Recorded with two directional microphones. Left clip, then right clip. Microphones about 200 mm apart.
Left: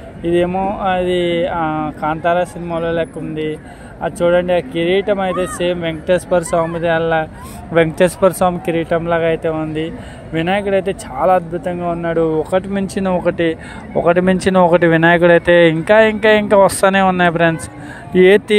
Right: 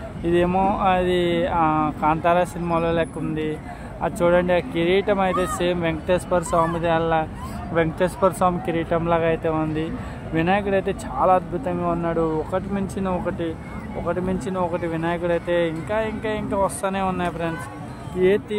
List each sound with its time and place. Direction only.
0.2 s speech: 15° left (ahead or behind)
0.5 s speech: 5° left (ahead or behind); by 13.6 s 35° left (ahead or behind)
14.0 s speech: 45° left (ahead or behind)